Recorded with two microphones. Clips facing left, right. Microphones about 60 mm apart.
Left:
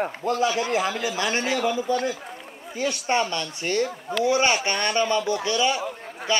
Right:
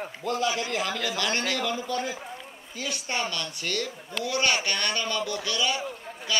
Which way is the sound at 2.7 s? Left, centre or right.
Left.